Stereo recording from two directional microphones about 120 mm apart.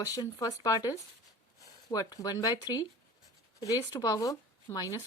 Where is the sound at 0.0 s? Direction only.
30° left (ahead or behind).